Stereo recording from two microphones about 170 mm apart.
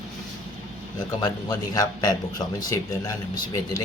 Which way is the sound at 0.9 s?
25° left (ahead or behind).